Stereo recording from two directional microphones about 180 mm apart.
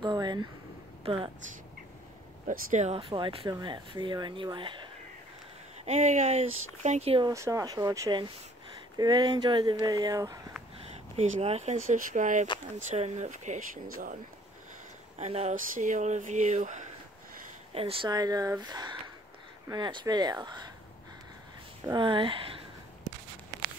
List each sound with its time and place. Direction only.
0.0 s a woman's voice: 25° right (ahead or behind)
2.4 s speech: 40° right (ahead or behind)
5.9 s speech: 40° right (ahead or behind)
7.2 s speech: 15° right (ahead or behind)
11.1 s speech: 35° right (ahead or behind)
15.1 s speech: 35° right (ahead or behind)
17.7 s speech: 30° right (ahead or behind)
21.8 s speech: 25° right (ahead or behind)